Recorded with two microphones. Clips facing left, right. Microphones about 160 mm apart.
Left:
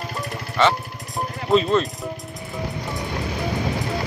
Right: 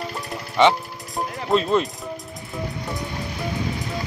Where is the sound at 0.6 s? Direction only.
15° right (ahead or behind).